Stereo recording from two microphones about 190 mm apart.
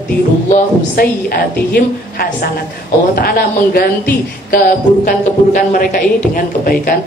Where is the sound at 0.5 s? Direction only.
50° left (ahead or behind).